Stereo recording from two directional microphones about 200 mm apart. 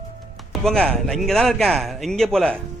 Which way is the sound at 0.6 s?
5° left (ahead or behind).